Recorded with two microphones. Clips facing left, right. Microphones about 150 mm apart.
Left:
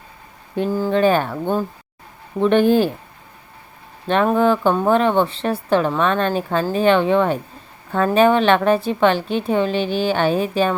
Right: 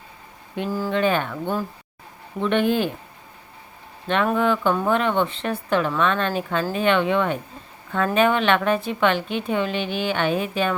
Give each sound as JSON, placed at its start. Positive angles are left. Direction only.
{"t": 0.9, "sound": "a woman's voice", "side_deg": 35}
{"t": 4.1, "sound": "a woman's voice", "side_deg": 35}